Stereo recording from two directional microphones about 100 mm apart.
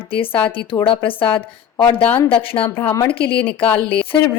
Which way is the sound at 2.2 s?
65° left (ahead or behind).